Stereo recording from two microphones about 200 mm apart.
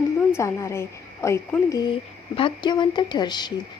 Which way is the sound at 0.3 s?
15° left (ahead or behind).